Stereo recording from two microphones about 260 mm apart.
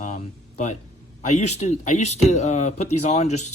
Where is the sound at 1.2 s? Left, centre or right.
Left.